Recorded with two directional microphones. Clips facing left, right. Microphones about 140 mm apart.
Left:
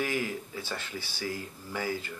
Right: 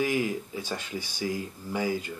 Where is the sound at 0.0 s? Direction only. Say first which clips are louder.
Right 4 dB; 15° right (ahead or behind).